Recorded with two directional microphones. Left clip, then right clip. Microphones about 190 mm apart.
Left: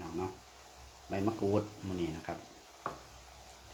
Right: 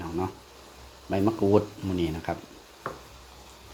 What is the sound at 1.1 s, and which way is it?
Speech, 50° right (ahead or behind).